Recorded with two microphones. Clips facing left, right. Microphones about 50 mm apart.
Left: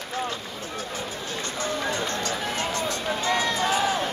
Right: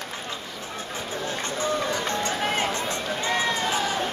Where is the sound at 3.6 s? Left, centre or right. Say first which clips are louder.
Left 2 dB; centre.